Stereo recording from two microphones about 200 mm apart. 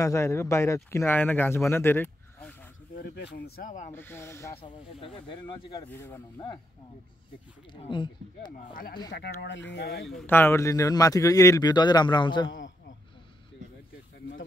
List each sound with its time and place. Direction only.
0.0 s speech: 15° left (ahead or behind)
3.0 s speech: 55° left (ahead or behind); by 3.9 s 40° left (ahead or behind)
3.9 s speech: 10° left (ahead or behind)
4.6 s speech: 25° left (ahead or behind); by 6.4 s 10° left (ahead or behind)
7.7 s speech: 25° left (ahead or behind)
8.5 s speech: 45° left (ahead or behind)
9.1 s speech: 55° left (ahead or behind)
10.0 s speech: 5° left (ahead or behind); by 12.4 s 20° left (ahead or behind)
12.4 s a man's voice: 70° left (ahead or behind)